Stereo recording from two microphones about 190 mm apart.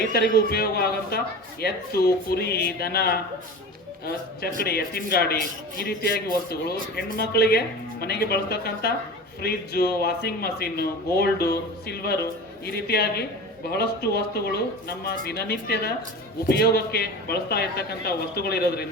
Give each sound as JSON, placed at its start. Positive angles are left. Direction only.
{"t": 0.1, "sound": "speech", "side_deg": 55}